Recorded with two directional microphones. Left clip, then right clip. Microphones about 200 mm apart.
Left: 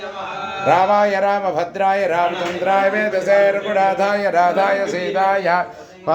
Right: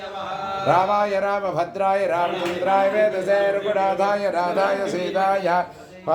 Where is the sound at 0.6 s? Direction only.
20° left (ahead or behind).